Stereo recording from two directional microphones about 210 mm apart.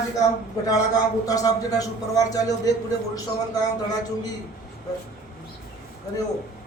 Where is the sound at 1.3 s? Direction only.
15° left (ahead or behind).